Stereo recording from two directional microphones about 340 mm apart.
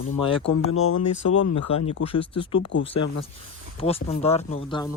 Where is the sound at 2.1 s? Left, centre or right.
Centre.